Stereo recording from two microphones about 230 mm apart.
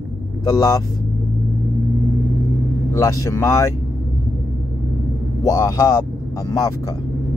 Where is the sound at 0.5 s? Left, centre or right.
Centre.